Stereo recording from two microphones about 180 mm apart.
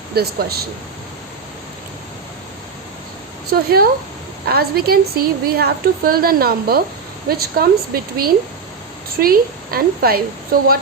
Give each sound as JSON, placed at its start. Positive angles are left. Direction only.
{"t": 0.1, "sound": "a woman's voice", "side_deg": -60}
{"t": 3.5, "sound": "a woman's voice", "side_deg": -60}